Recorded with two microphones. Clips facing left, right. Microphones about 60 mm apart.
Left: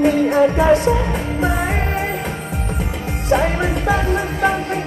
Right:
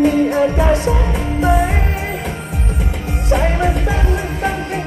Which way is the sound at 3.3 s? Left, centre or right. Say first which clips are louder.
Even; left.